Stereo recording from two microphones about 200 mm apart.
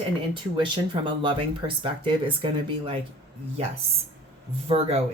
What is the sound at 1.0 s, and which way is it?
Speech, 25° right (ahead or behind).